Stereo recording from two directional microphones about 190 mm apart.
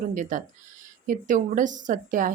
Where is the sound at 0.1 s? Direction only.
45° right (ahead or behind).